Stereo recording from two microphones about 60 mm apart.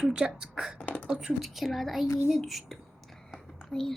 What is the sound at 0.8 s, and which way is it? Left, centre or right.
Speech, left.